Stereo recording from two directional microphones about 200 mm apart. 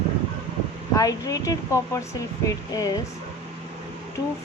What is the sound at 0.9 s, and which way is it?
Speech, 15° left (ahead or behind).